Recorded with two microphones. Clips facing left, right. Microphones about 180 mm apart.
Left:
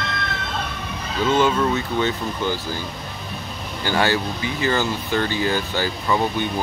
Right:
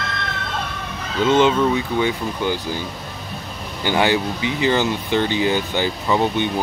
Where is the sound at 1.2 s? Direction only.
20° right (ahead or behind).